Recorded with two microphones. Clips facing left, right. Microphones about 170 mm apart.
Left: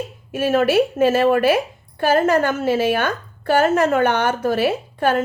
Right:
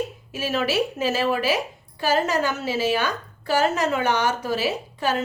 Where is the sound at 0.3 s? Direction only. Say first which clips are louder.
Left 9 dB; 55° left (ahead or behind).